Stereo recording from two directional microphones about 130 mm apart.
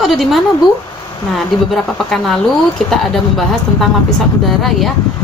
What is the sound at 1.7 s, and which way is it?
A woman's voice, centre (ahead or behind).